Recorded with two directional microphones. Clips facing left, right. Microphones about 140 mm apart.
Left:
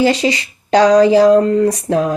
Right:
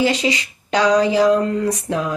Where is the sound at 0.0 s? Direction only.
35° left (ahead or behind).